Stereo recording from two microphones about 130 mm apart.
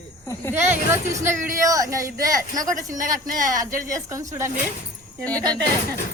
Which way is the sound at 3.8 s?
25° right (ahead or behind).